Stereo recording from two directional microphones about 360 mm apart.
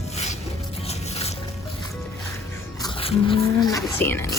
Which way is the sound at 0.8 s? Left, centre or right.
Centre.